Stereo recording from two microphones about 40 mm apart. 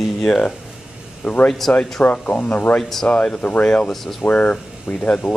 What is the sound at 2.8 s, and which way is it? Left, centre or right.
Speech, centre.